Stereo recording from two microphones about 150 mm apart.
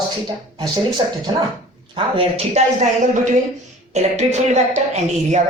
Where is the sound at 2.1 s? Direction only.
40° right (ahead or behind).